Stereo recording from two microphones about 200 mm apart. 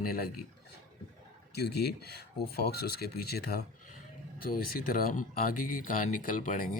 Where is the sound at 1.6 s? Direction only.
55° left (ahead or behind).